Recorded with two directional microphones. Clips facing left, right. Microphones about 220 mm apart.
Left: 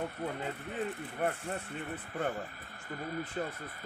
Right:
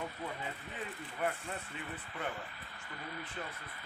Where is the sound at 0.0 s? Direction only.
55° left (ahead or behind).